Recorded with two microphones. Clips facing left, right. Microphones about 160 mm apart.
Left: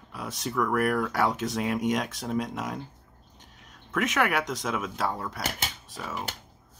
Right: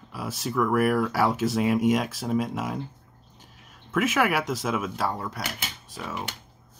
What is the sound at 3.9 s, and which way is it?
Speech, 5° right (ahead or behind).